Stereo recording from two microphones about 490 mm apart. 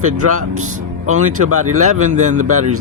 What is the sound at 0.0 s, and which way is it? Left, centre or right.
Speech, right.